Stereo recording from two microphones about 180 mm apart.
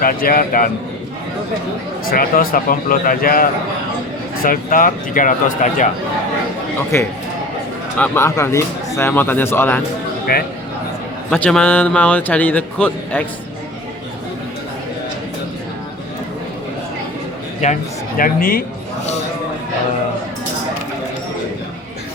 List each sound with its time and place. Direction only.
0.0 s speech: 55° left (ahead or behind)
2.0 s speech: 55° left (ahead or behind)
6.9 s a man's voice: 15° left (ahead or behind)
10.3 s speech: 55° left (ahead or behind)
11.3 s a man's voice: 5° left (ahead or behind)
17.6 s speech: 40° left (ahead or behind)
18.2 s speech: 50° left (ahead or behind)